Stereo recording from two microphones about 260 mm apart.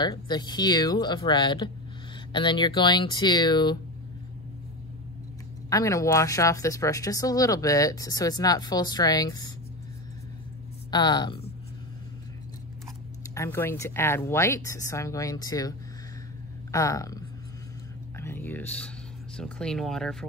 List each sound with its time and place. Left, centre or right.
0.0 s speech: centre
5.7 s speech: centre
10.9 s speech: centre
13.3 s speech: centre
16.7 s speech: centre
18.1 s whispering: centre
19.3 s speech: centre